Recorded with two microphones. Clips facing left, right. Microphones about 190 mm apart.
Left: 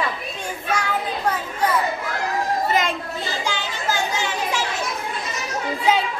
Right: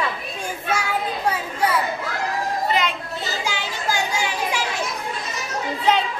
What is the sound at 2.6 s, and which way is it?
Chatter, 45° left (ahead or behind).